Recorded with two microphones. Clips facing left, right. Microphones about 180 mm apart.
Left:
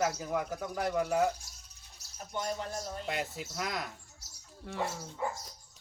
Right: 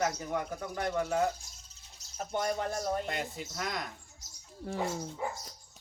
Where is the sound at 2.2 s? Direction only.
60° right (ahead or behind).